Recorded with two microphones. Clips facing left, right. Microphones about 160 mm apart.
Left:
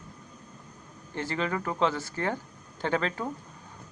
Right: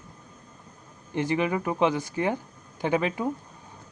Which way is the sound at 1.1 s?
15° right (ahead or behind).